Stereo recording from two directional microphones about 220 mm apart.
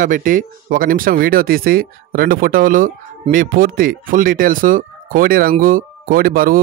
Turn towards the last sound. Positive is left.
turn(degrees=-40)  # may be behind; listen again after turning